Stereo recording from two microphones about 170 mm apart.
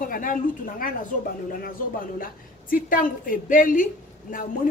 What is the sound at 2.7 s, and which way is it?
A woman's voice, 55° left (ahead or behind).